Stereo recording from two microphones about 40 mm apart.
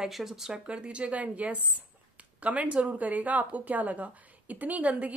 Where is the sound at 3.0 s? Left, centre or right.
Right.